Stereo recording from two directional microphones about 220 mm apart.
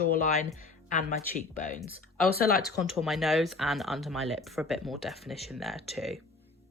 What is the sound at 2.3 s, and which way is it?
Speech, 45° left (ahead or behind).